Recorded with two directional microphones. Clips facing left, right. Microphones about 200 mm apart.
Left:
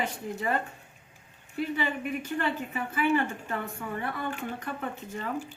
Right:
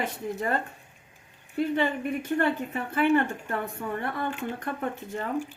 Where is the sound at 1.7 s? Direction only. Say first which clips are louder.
Right 4 dB; 50° right (ahead or behind).